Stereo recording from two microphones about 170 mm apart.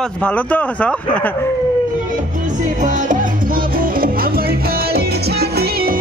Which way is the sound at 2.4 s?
50° right (ahead or behind).